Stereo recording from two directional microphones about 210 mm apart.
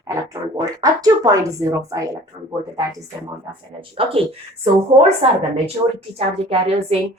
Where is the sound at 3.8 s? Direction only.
25° right (ahead or behind).